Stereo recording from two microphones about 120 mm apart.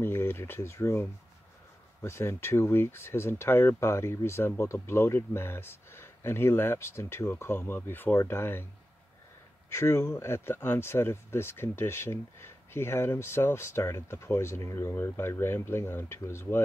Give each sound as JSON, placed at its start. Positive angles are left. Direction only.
{"t": 0.0, "sound": "speech", "side_deg": 20}
{"t": 2.0, "sound": "speech", "side_deg": 20}
{"t": 9.7, "sound": "speech", "side_deg": 25}